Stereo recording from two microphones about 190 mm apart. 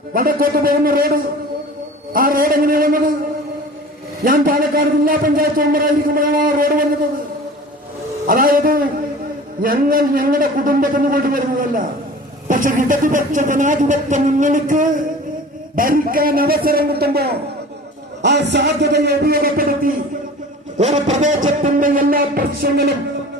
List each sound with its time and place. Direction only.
0.1 s a man's voice: 50° right (ahead or behind)
4.2 s a man's voice: 50° right (ahead or behind)
8.3 s a man's voice: 50° right (ahead or behind)
20.7 s a man's voice: 35° right (ahead or behind); by 22.9 s 50° right (ahead or behind)